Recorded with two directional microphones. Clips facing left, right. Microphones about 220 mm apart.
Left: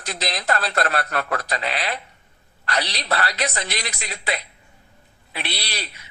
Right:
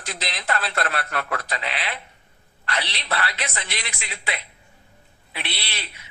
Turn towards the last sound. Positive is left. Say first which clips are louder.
# left 4 dB
turn(degrees=40)  # may be behind; listen again after turning